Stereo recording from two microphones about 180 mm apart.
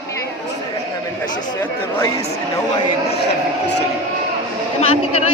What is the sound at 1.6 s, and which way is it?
Speech, 15° left (ahead or behind).